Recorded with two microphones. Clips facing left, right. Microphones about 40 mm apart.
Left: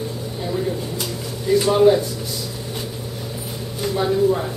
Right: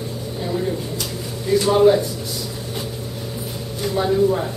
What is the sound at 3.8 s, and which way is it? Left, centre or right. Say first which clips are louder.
Speech: right 1 dB; centre.